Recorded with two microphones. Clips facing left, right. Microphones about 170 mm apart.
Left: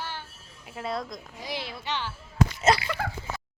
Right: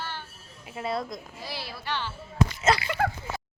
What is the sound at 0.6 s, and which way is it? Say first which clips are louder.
Speech: right 2 dB; centre (ahead or behind).